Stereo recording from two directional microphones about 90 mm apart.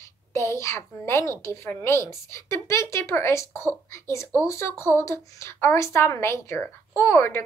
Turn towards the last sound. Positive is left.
turn(degrees=30)  # may be behind; listen again after turning